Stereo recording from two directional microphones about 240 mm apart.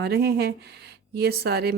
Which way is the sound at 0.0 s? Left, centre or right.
Right.